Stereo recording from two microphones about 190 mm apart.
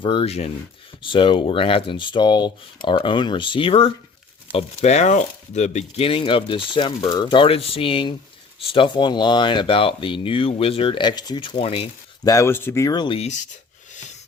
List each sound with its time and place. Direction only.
0.0 s speech: 25° left (ahead or behind)
12.2 s speech: 15° left (ahead or behind); by 13.4 s 35° left (ahead or behind)